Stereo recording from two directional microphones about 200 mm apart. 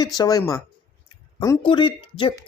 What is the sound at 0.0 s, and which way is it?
Speech, 20° left (ahead or behind).